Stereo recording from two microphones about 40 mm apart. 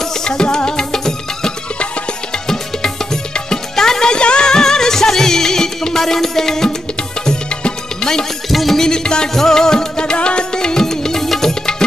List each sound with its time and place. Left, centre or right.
0.0 s music: centre
8.5 s music: centre
8.8 s music: centre